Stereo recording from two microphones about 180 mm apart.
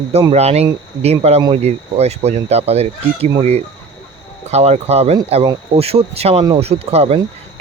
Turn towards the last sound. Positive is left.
turn(degrees=-35)  # may be behind; listen again after turning